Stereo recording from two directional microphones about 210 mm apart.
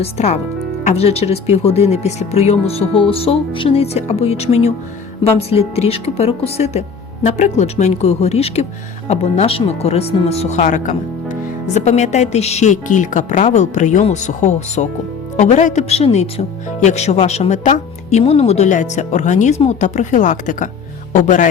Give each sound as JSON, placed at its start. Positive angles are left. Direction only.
{"t": 0.0, "sound": "speech", "side_deg": 30}